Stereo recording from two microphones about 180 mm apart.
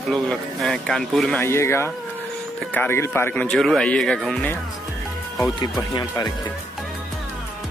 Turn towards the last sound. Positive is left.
turn(degrees=20)  # may be behind; listen again after turning